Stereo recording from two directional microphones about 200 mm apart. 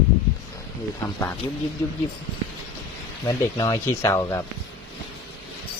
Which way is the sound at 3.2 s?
20° left (ahead or behind).